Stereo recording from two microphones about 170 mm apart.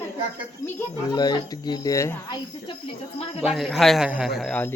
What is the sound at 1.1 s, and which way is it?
Speech, 25° left (ahead or behind).